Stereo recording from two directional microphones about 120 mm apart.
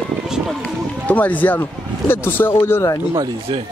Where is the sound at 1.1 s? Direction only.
15° left (ahead or behind).